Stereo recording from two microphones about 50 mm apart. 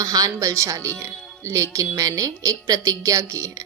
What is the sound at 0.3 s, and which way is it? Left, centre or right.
Speech, right.